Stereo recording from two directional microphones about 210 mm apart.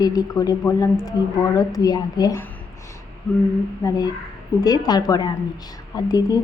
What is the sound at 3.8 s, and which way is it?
Speech, 15° left (ahead or behind).